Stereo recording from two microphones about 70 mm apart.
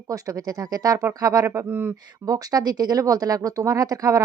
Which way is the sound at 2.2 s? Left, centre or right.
Right.